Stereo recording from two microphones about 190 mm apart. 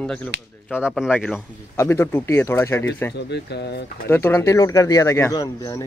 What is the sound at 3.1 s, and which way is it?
Speech, 60° left (ahead or behind).